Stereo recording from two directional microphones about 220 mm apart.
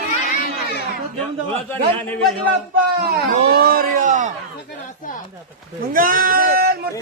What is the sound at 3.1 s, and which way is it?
Speech, 45° right (ahead or behind).